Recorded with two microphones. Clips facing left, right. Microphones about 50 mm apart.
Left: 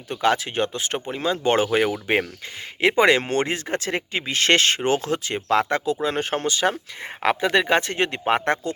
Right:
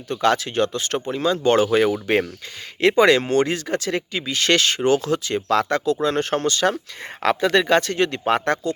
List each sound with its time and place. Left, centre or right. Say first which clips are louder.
0.1 s speech: right 2 dB; centre